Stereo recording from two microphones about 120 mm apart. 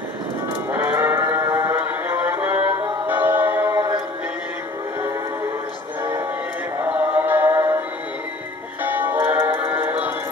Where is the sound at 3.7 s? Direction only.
30° right (ahead or behind).